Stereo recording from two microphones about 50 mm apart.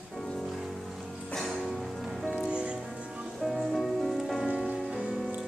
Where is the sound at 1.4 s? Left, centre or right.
Centre.